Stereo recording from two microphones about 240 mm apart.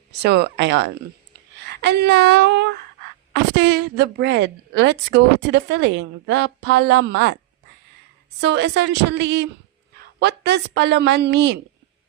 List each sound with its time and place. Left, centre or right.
0.2 s a woman's voice: right
8.4 s a woman's voice: right